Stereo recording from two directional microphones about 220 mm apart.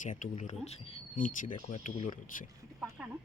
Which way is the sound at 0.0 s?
35° left (ahead or behind).